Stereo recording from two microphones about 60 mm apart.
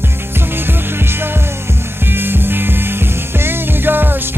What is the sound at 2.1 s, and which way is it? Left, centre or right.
Music, right.